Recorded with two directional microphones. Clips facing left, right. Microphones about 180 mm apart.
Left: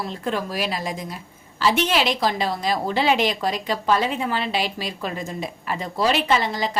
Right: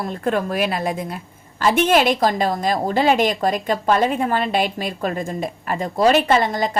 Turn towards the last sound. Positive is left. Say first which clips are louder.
# right 4 dB
turn(degrees=-50)  # may be behind; listen again after turning